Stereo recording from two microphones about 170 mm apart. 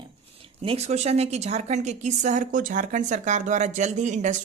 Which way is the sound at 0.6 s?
35° right (ahead or behind).